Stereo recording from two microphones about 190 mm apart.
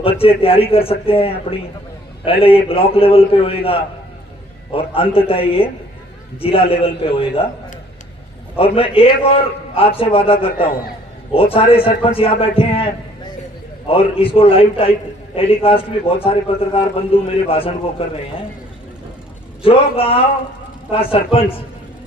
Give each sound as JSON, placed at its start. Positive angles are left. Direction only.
{"t": 0.0, "sound": "a man's voice", "side_deg": 30}
{"t": 4.9, "sound": "a man's voice", "side_deg": 30}
{"t": 8.5, "sound": "a man's voice", "side_deg": 30}
{"t": 10.3, "sound": "a man's voice", "side_deg": 50}
{"t": 11.3, "sound": "a man's voice", "side_deg": 30}
{"t": 19.6, "sound": "a man's voice", "side_deg": 30}